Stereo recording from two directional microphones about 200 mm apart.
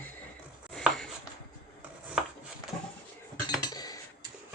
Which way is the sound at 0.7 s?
5° left (ahead or behind).